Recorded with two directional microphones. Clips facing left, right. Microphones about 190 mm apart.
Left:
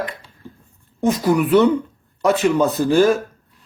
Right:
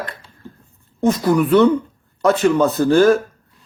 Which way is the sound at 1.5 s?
20° left (ahead or behind).